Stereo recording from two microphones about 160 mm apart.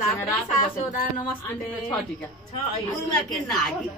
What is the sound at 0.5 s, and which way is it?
Speech, 55° left (ahead or behind).